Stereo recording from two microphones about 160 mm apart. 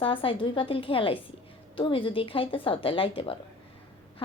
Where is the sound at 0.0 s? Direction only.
35° left (ahead or behind).